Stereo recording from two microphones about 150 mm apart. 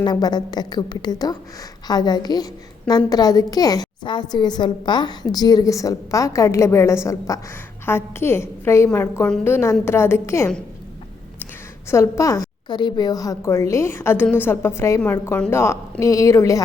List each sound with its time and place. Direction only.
0.0 s a woman's voice: 30° left (ahead or behind)
11.9 s a woman's voice: 20° left (ahead or behind)